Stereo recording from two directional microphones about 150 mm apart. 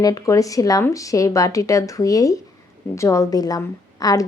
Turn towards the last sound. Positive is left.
turn(degrees=25)  # may be behind; listen again after turning